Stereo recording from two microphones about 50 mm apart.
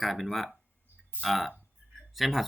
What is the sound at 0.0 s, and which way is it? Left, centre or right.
Speech, centre.